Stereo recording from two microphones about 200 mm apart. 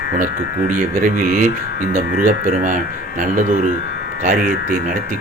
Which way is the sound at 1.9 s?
10° right (ahead or behind).